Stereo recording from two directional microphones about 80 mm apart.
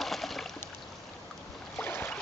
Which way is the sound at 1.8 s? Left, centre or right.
Left.